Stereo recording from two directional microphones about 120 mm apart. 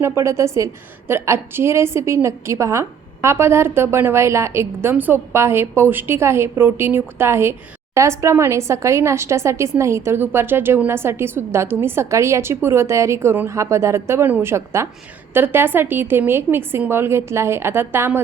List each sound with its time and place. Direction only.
0.0 s a woman's voice: 20° right (ahead or behind)